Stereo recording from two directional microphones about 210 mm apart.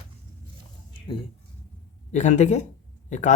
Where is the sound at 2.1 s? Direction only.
35° left (ahead or behind).